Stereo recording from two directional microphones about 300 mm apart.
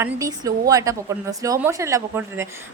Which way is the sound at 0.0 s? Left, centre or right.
Centre.